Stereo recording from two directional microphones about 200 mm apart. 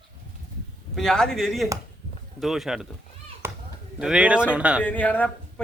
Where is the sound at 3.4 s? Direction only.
10° right (ahead or behind).